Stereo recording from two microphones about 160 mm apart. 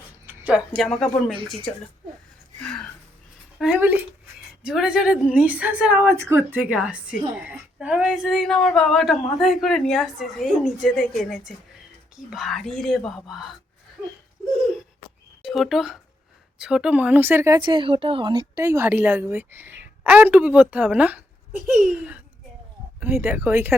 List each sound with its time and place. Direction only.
0.3 s a sound: 10° right (ahead or behind)
0.8 s a woman's voice: centre (ahead or behind)
3.6 s a woman's voice: 10° right (ahead or behind)
15.4 s speech: centre (ahead or behind)